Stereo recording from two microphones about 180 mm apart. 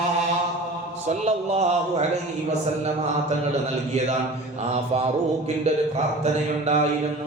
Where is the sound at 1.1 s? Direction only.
40° right (ahead or behind).